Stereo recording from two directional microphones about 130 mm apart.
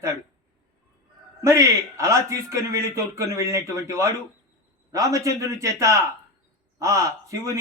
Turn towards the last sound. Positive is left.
turn(degrees=-25)  # may be behind; listen again after turning